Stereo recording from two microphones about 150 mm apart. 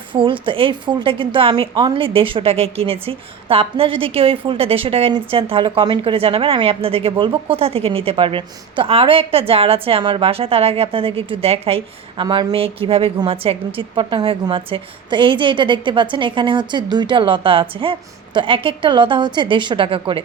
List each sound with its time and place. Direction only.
0.1 s a woman's voice: 35° right (ahead or behind)